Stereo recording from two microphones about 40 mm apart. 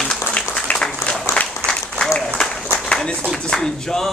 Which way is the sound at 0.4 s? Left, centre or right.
Left.